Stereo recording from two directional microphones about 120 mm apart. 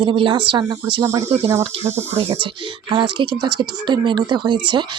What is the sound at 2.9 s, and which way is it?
Speech, 40° right (ahead or behind).